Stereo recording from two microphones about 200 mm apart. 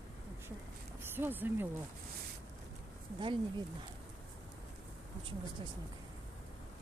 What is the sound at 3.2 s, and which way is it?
Speech, 25° right (ahead or behind).